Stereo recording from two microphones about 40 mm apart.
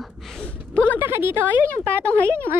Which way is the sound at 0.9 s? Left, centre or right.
Right.